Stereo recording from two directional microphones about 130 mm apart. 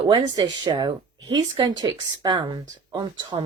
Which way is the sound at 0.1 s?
35° right (ahead or behind).